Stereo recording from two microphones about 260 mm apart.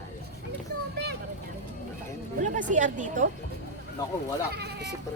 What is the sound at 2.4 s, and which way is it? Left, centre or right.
Speech, right.